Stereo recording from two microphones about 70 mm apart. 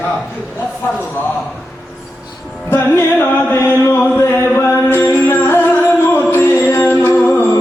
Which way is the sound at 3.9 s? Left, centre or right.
Left.